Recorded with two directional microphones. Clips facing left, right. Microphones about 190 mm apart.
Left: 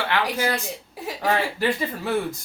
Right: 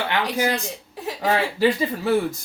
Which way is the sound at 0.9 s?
10° left (ahead or behind).